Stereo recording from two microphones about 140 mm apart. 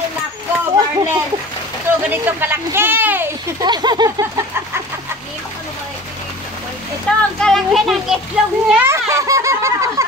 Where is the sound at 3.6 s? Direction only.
30° right (ahead or behind).